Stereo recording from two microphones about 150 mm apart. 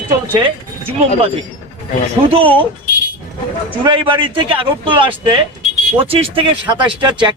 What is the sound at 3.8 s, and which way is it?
A man's voice, 35° right (ahead or behind).